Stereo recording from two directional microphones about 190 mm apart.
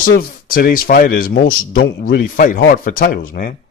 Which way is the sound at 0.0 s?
50° left (ahead or behind).